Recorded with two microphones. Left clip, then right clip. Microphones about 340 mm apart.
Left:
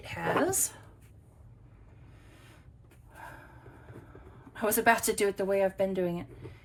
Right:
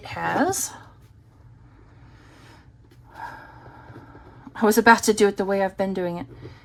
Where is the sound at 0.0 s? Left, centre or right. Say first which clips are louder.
Right 6 dB; centre.